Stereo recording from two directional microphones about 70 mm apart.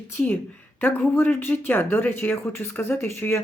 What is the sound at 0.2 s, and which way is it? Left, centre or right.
Speech, centre.